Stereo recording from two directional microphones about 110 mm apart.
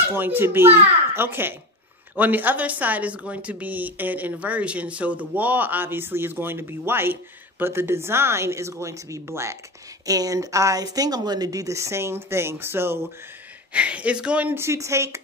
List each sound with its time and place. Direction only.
0.1 s a woman's voice: 20° right (ahead or behind)